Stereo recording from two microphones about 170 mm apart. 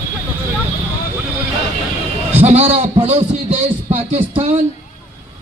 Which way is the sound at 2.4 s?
40° right (ahead or behind).